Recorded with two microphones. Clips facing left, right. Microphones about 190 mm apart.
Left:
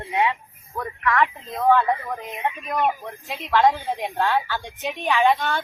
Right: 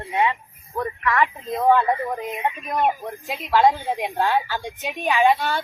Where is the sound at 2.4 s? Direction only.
15° right (ahead or behind).